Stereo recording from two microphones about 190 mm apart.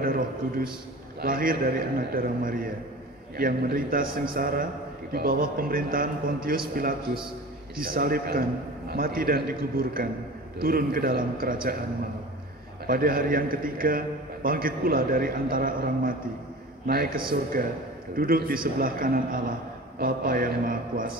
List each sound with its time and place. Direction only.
0.0 s a sound: 50° right (ahead or behind)
1.2 s a man's voice: 50° right (ahead or behind)
12.8 s a man's voice: 50° right (ahead or behind)